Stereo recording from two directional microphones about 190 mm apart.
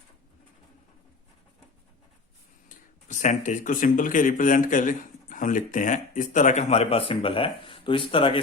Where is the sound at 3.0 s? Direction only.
40° left (ahead or behind).